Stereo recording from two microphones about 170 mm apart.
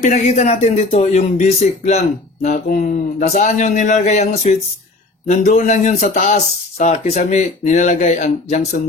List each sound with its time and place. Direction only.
0.0 s speech: 45° left (ahead or behind)